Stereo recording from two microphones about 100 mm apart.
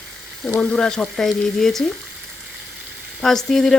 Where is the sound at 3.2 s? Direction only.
5° left (ahead or behind).